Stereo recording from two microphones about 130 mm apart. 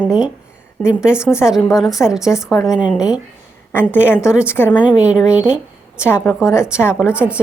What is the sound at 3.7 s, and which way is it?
Speech, 15° left (ahead or behind).